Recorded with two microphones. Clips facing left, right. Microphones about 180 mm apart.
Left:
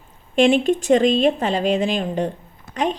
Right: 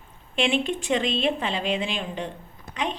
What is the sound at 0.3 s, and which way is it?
Speech, 40° left (ahead or behind).